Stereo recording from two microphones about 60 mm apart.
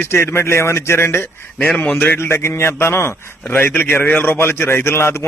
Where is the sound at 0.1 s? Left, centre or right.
Left.